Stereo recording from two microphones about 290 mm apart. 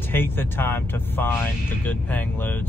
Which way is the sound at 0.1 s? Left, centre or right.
Centre.